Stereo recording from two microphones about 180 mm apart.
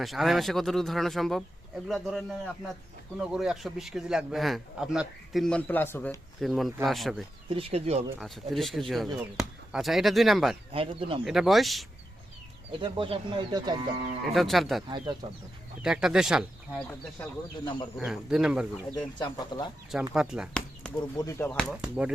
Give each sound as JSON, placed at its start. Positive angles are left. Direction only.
{"t": 0.0, "sound": "a man's voice", "side_deg": 0}
{"t": 6.4, "sound": "a man's voice", "side_deg": 0}
{"t": 7.5, "sound": "speech", "side_deg": -35}
{"t": 8.2, "sound": "a man's voice", "side_deg": 0}
{"t": 10.7, "sound": "speech", "side_deg": -30}
{"t": 11.3, "sound": "a man's voice", "side_deg": 0}
{"t": 12.8, "sound": "speech", "side_deg": -30}
{"t": 14.3, "sound": "a man's voice", "side_deg": 0}
{"t": 14.8, "sound": "speech", "side_deg": -25}
{"t": 15.8, "sound": "a man's voice", "side_deg": -5}
{"t": 18.0, "sound": "a man's voice", "side_deg": -5}
{"t": 18.9, "sound": "speech", "side_deg": 25}
{"t": 20.1, "sound": "a sound", "side_deg": -5}
{"t": 21.2, "sound": "a man's voice", "side_deg": 15}